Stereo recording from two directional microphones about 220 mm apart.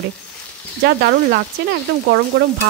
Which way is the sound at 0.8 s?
45° right (ahead or behind).